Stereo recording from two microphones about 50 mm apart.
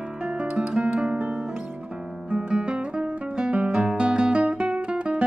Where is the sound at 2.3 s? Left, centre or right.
Centre.